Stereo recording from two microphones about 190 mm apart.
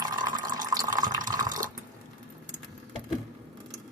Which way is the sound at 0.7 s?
20° right (ahead or behind).